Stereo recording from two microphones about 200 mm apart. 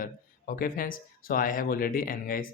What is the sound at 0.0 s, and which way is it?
Speech, 45° left (ahead or behind).